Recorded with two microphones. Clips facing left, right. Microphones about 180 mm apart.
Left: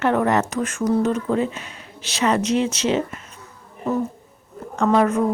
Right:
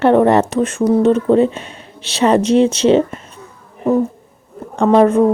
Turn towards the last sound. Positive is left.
turn(degrees=-30)  # may be behind; listen again after turning